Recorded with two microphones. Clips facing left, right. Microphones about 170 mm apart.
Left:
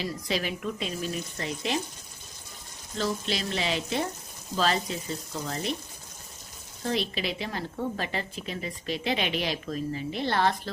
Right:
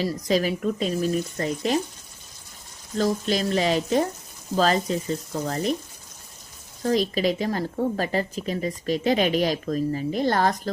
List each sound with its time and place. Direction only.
0.3 s speech: 40° right (ahead or behind)
3.0 s speech: 45° right (ahead or behind)
6.8 s speech: 40° right (ahead or behind)